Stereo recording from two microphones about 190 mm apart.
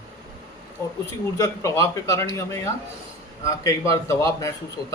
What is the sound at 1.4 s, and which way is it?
Speech, 15° left (ahead or behind).